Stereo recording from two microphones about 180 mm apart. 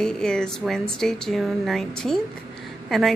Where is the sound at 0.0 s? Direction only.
5° left (ahead or behind).